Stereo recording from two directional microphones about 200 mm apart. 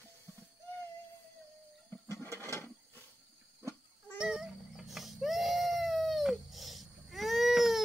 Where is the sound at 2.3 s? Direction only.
15° right (ahead or behind).